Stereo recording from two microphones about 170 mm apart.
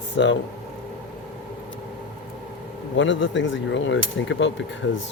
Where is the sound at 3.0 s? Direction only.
90° left.